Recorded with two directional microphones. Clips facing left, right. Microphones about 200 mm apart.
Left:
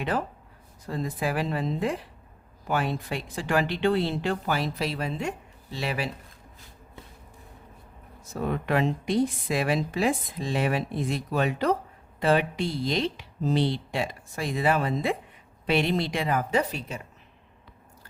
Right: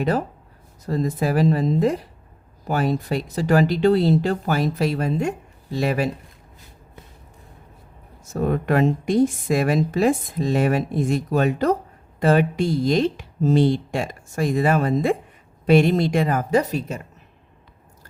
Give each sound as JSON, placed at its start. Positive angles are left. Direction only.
{"t": 0.0, "sound": "speech", "side_deg": -40}
{"t": 8.3, "sound": "speech", "side_deg": -45}